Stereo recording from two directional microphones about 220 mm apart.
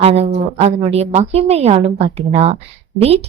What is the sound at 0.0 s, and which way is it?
Speech, 25° right (ahead or behind).